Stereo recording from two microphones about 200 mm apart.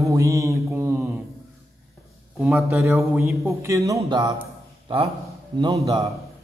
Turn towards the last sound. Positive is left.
turn(degrees=-15)  # may be behind; listen again after turning